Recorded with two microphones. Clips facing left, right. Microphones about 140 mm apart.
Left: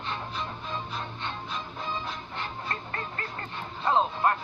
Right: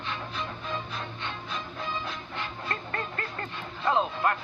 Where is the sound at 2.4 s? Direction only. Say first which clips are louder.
Right 1 dB; 25° left (ahead or behind).